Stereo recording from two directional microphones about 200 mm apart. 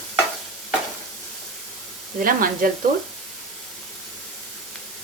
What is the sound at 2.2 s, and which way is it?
Speech, 45° right (ahead or behind).